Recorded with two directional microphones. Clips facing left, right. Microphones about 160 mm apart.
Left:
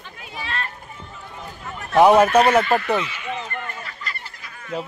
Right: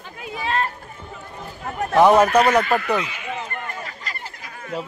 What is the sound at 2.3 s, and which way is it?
Speech, 30° left (ahead or behind).